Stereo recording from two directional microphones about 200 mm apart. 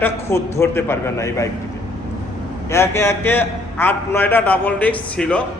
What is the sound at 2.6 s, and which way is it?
A man's voice, 15° left (ahead or behind).